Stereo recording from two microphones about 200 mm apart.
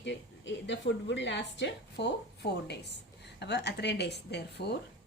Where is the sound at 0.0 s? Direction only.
60° left (ahead or behind).